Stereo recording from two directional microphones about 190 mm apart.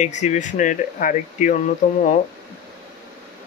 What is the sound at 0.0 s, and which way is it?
Speech, 40° left (ahead or behind).